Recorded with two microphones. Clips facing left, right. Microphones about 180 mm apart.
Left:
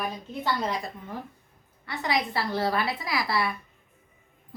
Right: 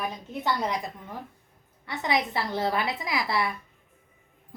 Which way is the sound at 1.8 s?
20° right (ahead or behind).